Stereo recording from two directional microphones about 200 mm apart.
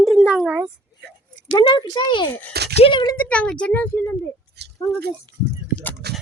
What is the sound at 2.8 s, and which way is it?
Speech, 25° left (ahead or behind).